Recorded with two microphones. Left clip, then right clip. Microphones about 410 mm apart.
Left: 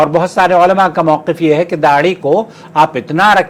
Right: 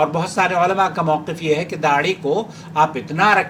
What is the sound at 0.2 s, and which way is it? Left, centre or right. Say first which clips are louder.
A man's voice: left 8 dB; left.